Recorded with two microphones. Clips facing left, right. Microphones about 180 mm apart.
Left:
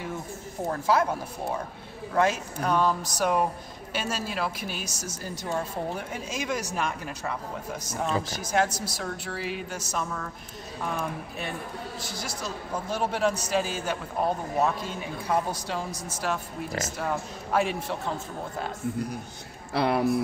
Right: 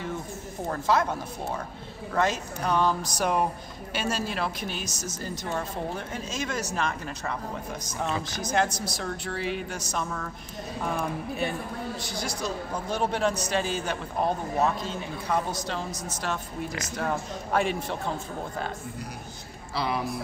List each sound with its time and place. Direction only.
0.7 s a man's voice: 10° left (ahead or behind)
12.0 s a man's voice: 5° left (ahead or behind)
19.7 s speech: 60° left (ahead or behind)